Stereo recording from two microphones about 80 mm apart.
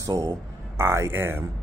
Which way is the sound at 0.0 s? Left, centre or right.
Right.